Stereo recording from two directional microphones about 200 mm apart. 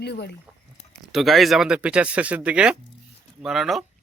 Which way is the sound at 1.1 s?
Centre (ahead or behind).